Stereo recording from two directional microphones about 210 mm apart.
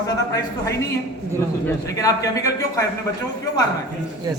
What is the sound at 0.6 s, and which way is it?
A man's voice, 15° left (ahead or behind).